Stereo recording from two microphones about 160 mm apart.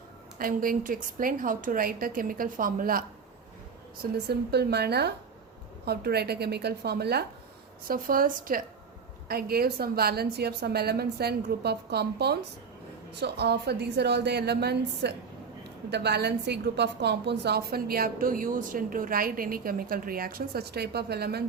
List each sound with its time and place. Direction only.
0.3 s a woman's voice: 65° right (ahead or behind)
4.1 s a woman's voice: 90° right
7.9 s a woman's voice: 60° right (ahead or behind)
9.3 s a woman's voice: 70° right (ahead or behind)